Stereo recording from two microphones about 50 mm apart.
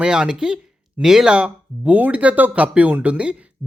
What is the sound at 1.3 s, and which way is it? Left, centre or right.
Speech, right.